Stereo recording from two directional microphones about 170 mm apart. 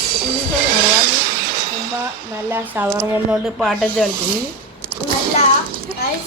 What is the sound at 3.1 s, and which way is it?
Speech, centre (ahead or behind).